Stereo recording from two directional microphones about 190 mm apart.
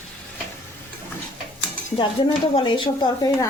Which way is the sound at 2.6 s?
25° left (ahead or behind).